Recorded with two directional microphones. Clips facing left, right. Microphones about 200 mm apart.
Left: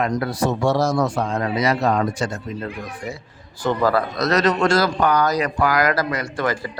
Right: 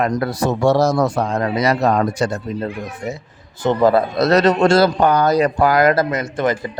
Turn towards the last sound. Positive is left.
turn(degrees=-20)  # may be behind; listen again after turning